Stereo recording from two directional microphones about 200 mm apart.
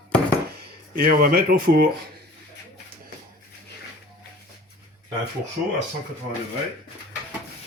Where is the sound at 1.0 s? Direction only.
50° right (ahead or behind).